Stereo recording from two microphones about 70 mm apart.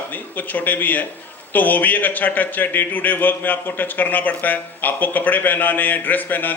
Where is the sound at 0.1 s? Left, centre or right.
Left.